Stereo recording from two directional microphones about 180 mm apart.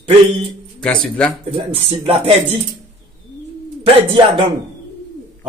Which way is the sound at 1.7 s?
30° right (ahead or behind).